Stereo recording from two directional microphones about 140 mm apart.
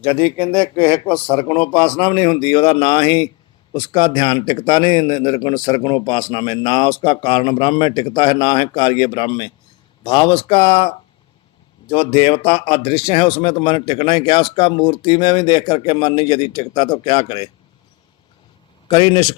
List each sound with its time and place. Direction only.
0.0 s a man's voice: 40° left (ahead or behind)
0.6 s a man's voice: 20° left (ahead or behind)
1.6 s a man's voice: 45° left (ahead or behind)
18.9 s a man's voice: 30° left (ahead or behind)